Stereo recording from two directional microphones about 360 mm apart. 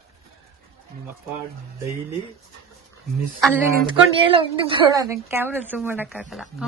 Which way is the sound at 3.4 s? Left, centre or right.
Centre.